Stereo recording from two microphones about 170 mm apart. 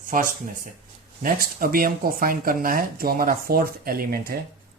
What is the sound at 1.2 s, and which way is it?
Speech, 55° right (ahead or behind).